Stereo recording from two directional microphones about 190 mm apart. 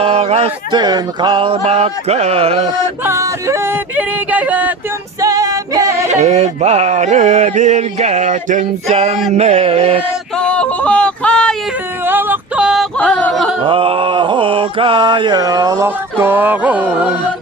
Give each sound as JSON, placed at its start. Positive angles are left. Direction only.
{"t": 0.0, "sound": "a sound", "side_deg": -35}
{"t": 3.0, "sound": "music", "side_deg": -15}
{"t": 5.2, "sound": "music", "side_deg": -20}
{"t": 6.1, "sound": "a sound", "side_deg": -35}
{"t": 10.3, "sound": "yodeling", "side_deg": 5}
{"t": 12.0, "sound": "yodeling", "side_deg": -10}
{"t": 13.6, "sound": "mantra", "side_deg": -25}